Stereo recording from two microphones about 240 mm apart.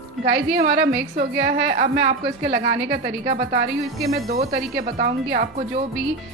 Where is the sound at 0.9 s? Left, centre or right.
Right.